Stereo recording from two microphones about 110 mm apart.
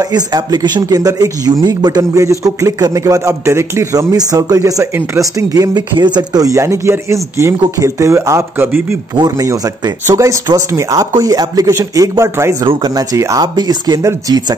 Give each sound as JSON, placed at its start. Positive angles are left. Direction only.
{"t": 0.0, "sound": "speech", "side_deg": -35}
{"t": 9.1, "sound": "speech", "side_deg": -40}
{"t": 9.5, "sound": "speech", "side_deg": -30}